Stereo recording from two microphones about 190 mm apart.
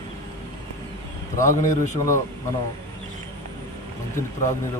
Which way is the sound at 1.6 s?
15° left (ahead or behind).